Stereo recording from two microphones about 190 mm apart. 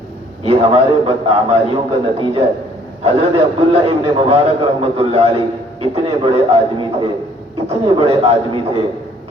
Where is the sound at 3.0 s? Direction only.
35° right (ahead or behind).